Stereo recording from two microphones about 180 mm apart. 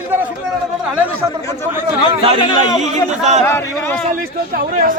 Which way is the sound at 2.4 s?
25° left (ahead or behind).